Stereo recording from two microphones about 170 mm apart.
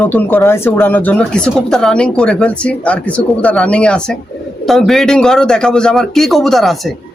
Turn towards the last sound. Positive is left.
turn(degrees=0)  # may be behind; listen again after turning